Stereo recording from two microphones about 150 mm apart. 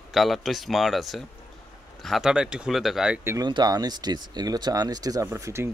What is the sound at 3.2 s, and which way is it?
Speech, 20° right (ahead or behind).